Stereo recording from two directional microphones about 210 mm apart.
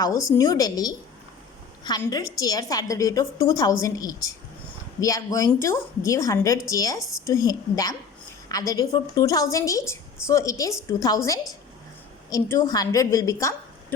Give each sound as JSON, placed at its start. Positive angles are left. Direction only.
{"t": 0.3, "sound": "a woman's voice", "side_deg": 15}